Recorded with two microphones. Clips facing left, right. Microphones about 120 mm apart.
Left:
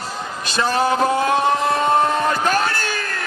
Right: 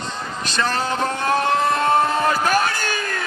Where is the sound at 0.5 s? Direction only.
10° left (ahead or behind).